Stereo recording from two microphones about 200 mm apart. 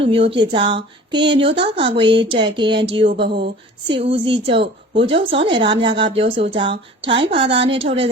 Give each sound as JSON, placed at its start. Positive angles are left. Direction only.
{"t": 0.0, "sound": "a woman's voice", "side_deg": -25}
{"t": 3.2, "sound": "a sound", "side_deg": -55}
{"t": 3.8, "sound": "a woman's voice", "side_deg": -25}